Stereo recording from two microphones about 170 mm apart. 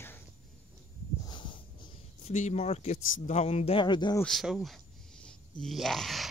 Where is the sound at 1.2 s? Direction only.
30° left (ahead or behind).